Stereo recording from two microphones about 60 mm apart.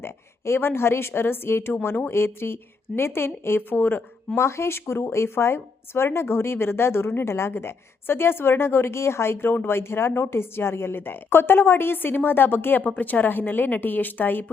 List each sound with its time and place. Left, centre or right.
0.0 s a woman's voice: left
4.4 s a woman's voice: left